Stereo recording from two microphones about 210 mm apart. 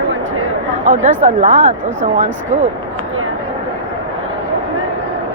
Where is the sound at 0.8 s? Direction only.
35° right (ahead or behind).